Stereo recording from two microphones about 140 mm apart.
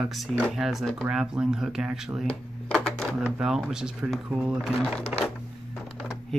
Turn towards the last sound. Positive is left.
turn(degrees=5)  # may be behind; listen again after turning